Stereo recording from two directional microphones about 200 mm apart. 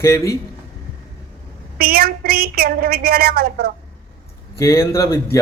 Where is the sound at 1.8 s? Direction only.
50° right (ahead or behind).